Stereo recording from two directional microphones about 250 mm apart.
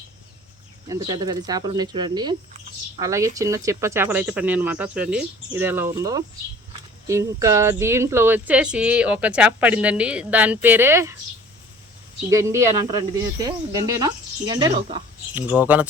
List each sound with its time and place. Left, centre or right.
0.9 s speech: centre
12.3 s speech: centre
15.4 s speech: centre